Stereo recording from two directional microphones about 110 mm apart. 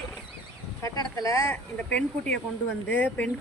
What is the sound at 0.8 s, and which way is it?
Speech, 35° left (ahead or behind).